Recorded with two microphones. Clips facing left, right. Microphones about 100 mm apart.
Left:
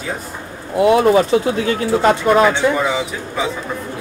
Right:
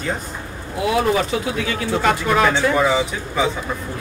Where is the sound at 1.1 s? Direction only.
35° left (ahead or behind).